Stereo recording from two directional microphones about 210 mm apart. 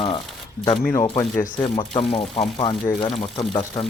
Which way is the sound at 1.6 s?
25° left (ahead or behind).